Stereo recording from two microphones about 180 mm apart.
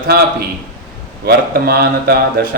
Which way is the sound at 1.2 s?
60° right (ahead or behind).